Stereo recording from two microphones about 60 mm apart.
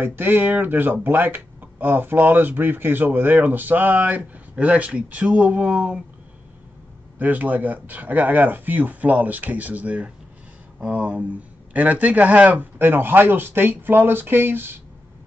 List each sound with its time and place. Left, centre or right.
0.0 s speech: right
7.2 s speech: right